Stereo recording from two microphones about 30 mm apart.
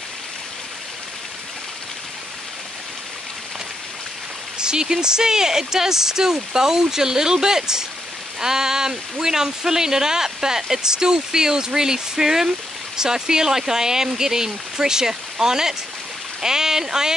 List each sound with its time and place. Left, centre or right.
4.6 s speech: right